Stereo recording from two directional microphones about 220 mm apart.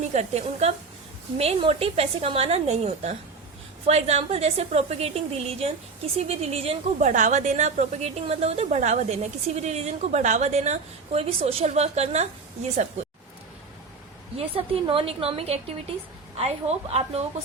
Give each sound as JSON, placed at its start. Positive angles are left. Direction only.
{"t": 0.1, "sound": "a woman's voice", "side_deg": -30}
{"t": 14.3, "sound": "a woman's voice", "side_deg": -25}